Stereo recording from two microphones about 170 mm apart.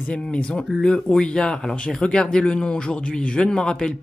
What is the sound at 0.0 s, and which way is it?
Speech, 5° left (ahead or behind).